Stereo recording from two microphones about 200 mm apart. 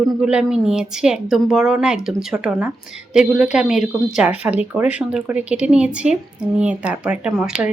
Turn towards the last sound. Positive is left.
turn(degrees=-5)  # may be behind; listen again after turning